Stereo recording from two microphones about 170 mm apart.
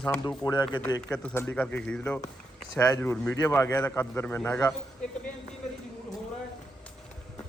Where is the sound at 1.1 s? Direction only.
10° left (ahead or behind).